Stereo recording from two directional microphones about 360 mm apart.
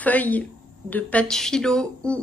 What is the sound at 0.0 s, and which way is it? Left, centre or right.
A woman's voice, centre.